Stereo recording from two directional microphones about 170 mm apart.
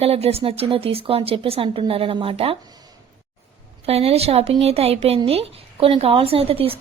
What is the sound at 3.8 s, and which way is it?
Speech, 35° right (ahead or behind).